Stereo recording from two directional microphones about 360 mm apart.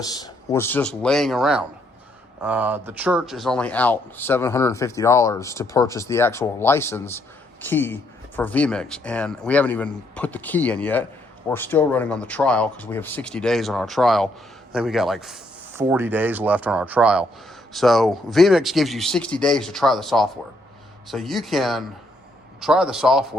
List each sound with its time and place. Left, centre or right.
0.2 s speech: centre